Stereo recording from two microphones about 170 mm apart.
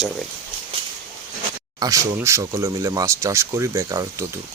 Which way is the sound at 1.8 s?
20° right (ahead or behind).